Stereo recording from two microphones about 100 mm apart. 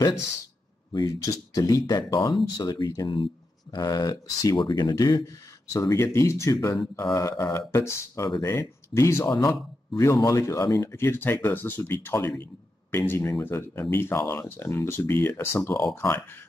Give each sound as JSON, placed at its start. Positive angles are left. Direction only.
{"t": 0.9, "sound": "speech", "side_deg": 35}